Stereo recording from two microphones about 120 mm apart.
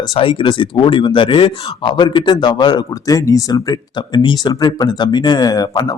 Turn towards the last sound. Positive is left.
turn(degrees=35)  # may be behind; listen again after turning